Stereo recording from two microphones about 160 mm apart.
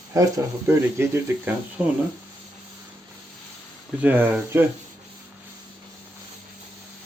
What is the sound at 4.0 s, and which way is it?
Speech, 10° right (ahead or behind).